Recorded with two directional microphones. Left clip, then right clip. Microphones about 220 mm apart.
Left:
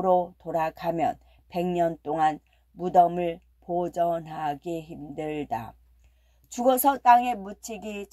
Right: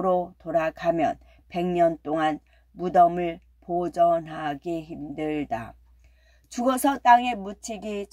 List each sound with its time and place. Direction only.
0.0 s speech: 10° left (ahead or behind)